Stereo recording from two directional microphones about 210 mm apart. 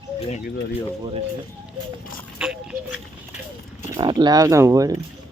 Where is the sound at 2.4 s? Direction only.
5° right (ahead or behind).